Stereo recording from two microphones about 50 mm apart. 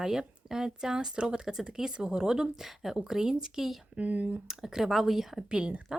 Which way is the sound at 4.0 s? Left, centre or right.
Right.